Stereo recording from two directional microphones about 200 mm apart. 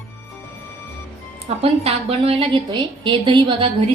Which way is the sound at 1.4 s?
30° right (ahead or behind).